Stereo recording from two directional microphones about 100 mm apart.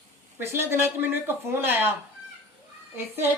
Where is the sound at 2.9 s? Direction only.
25° right (ahead or behind).